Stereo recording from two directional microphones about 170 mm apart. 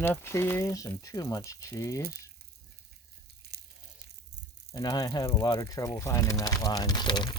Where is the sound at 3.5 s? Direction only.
75° right (ahead or behind).